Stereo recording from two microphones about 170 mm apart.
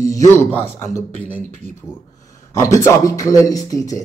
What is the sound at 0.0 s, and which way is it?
A man's voice, 20° left (ahead or behind).